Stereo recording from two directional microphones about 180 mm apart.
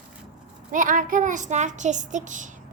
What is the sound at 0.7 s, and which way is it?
A child's voice, 45° right (ahead or behind).